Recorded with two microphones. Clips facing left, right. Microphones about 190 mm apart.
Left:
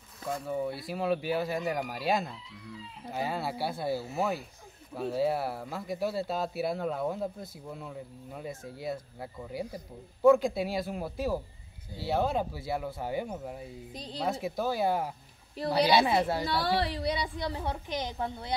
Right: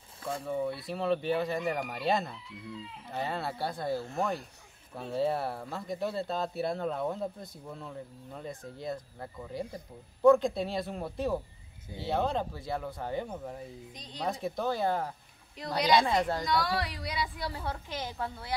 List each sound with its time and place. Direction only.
0.5 s speech: 5° left (ahead or behind)
16.4 s a woman's voice: 30° left (ahead or behind)